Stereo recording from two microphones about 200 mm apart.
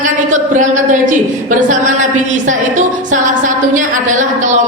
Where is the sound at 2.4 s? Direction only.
40° right (ahead or behind).